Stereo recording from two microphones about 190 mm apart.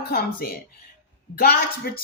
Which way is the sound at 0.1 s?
55° left (ahead or behind).